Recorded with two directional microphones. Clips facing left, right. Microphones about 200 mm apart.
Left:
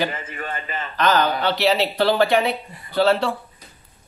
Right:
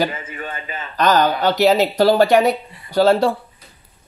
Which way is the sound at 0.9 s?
40° right (ahead or behind).